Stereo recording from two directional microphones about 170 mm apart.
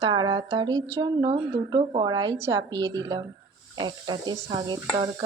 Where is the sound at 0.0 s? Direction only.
25° right (ahead or behind).